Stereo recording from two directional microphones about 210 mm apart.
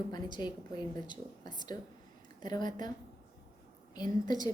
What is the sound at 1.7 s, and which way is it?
A woman's voice, 20° left (ahead or behind).